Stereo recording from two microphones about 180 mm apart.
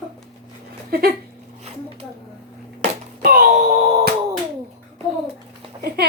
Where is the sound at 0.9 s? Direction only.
60° right (ahead or behind).